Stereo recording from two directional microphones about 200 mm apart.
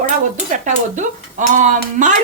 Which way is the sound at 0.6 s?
40° right (ahead or behind).